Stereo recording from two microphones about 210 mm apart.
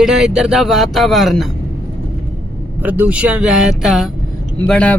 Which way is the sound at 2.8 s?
10° right (ahead or behind).